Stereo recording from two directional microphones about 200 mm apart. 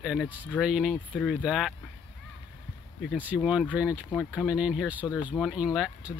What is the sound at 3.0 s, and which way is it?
Speech, 5° right (ahead or behind).